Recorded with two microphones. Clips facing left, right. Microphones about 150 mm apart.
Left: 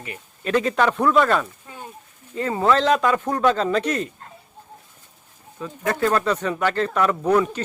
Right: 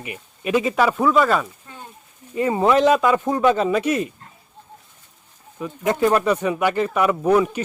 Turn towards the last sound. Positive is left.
turn(degrees=-10)  # may be behind; listen again after turning